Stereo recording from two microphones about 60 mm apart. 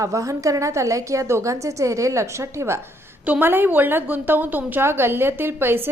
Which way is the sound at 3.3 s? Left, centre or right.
Right.